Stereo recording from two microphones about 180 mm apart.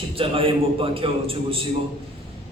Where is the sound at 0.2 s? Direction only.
30° right (ahead or behind).